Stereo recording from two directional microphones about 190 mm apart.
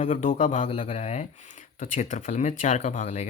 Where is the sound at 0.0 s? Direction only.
40° left (ahead or behind).